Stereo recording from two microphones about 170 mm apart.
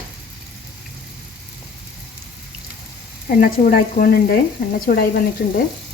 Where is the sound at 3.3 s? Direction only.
55° left (ahead or behind).